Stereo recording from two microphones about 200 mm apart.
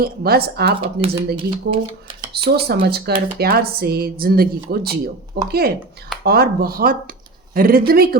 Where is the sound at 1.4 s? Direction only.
25° right (ahead or behind).